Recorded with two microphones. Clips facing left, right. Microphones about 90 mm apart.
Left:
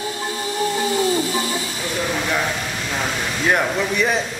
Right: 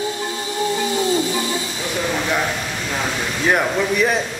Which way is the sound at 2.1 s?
5° right (ahead or behind).